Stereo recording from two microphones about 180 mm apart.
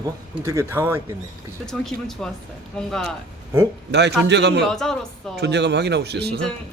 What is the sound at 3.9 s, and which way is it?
Speech, 70° right (ahead or behind).